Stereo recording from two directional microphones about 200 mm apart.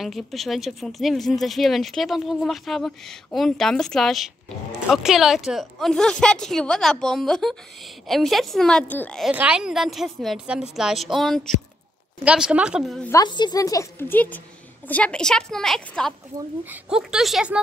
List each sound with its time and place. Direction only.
0.0 s speech: centre (ahead or behind)
9.3 s speech: 5° right (ahead or behind)
13.1 s a woman's voice: 20° left (ahead or behind); by 17.6 s centre (ahead or behind)